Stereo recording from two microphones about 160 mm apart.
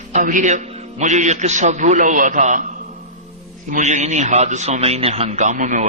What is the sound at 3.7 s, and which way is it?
A man's voice, 45° right (ahead or behind).